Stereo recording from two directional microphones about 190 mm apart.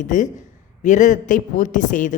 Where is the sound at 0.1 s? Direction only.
40° left (ahead or behind).